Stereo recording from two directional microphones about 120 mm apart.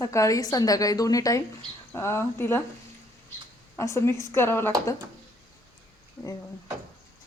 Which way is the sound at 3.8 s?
25° left (ahead or behind).